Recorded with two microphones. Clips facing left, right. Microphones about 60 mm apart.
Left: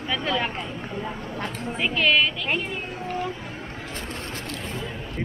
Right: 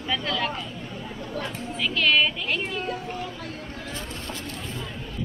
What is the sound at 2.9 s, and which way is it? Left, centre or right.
Speech, left.